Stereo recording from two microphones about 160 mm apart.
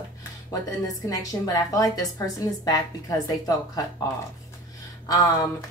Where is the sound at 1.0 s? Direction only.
25° left (ahead or behind).